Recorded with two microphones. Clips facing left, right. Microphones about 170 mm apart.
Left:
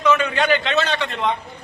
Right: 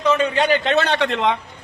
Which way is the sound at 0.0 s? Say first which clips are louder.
Right 1 dB; 30° right (ahead or behind).